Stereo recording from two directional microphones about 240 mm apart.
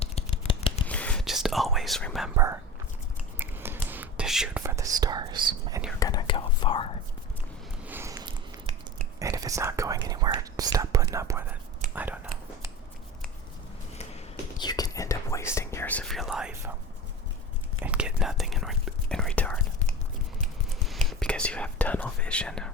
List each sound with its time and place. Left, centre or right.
0.0 s scissors: left
0.9 s whispering: centre
2.3 s speech: centre
3.3 s whispering: centre
6.0 s speech: centre
7.9 s sniff: centre
9.3 s speech: centre
11.9 s whispering: centre
14.6 s speech: centre
17.8 s whispering: centre
21.1 s speech: centre